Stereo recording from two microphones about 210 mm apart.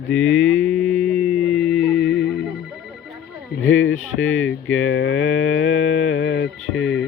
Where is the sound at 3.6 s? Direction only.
70° left (ahead or behind).